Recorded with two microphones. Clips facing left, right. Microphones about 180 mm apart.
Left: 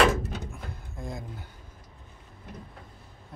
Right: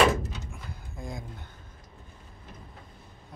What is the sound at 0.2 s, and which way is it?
Door, 60° left (ahead or behind).